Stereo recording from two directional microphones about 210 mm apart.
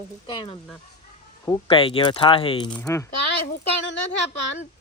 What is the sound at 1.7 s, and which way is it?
Speech, 25° left (ahead or behind).